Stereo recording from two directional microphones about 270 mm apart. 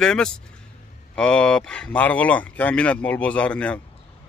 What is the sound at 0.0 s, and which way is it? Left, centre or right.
Speech, centre.